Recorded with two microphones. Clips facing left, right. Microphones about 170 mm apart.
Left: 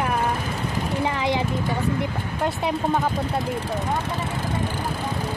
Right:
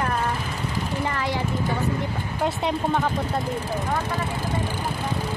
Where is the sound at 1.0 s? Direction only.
20° left (ahead or behind).